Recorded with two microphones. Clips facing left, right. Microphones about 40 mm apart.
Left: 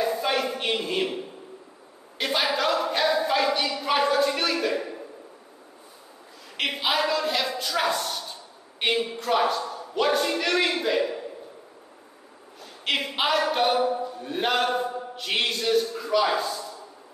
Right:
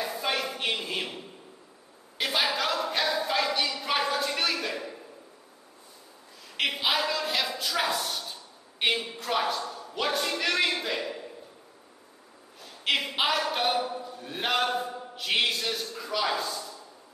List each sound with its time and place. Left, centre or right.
0.0 s a sound: centre
2.1 s speech: centre
6.5 s a woman's voice: centre
12.8 s speech: centre